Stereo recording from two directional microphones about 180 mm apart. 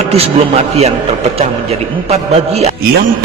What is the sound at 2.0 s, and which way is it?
Speech, 35° right (ahead or behind).